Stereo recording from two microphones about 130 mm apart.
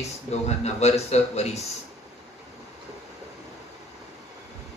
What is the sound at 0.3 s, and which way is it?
Speech, 55° left (ahead or behind).